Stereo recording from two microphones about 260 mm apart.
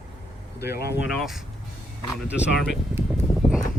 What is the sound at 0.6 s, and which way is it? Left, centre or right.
Speech, left.